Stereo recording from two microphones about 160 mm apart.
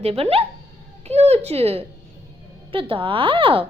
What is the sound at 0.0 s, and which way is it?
A child's voice, 35° right (ahead or behind).